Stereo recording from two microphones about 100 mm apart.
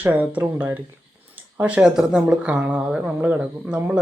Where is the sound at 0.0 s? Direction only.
15° right (ahead or behind).